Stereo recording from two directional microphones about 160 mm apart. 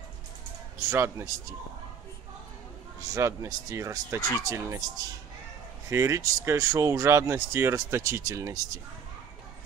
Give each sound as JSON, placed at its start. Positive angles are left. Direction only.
{"t": 0.8, "sound": "speech", "side_deg": -15}
{"t": 3.0, "sound": "speech", "side_deg": -20}